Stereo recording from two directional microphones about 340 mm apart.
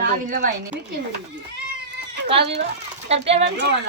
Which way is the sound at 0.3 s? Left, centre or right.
Right.